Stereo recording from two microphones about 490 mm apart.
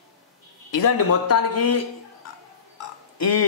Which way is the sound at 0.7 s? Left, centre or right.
Left.